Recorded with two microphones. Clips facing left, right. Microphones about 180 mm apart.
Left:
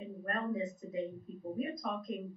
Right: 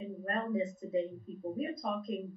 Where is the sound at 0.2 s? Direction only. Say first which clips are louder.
Right 2 dB; 25° right (ahead or behind).